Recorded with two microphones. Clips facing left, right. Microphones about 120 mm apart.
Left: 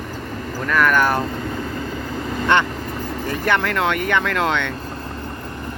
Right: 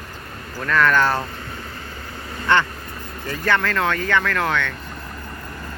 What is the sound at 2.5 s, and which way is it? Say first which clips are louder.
Speech: even; 20° left (ahead or behind).